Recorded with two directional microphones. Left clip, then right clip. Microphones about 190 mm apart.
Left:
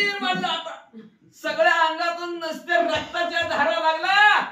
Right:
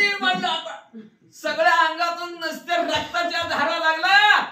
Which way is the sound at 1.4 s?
10° right (ahead or behind).